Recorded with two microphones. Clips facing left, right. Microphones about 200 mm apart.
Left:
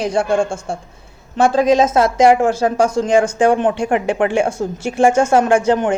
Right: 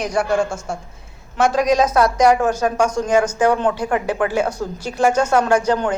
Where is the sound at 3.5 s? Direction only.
20° left (ahead or behind).